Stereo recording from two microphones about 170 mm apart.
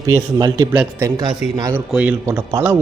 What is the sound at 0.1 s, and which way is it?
Speech, 25° right (ahead or behind).